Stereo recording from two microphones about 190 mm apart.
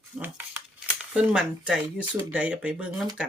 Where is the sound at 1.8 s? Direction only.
25° right (ahead or behind).